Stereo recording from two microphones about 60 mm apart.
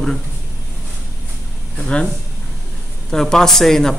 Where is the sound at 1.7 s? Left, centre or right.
Centre.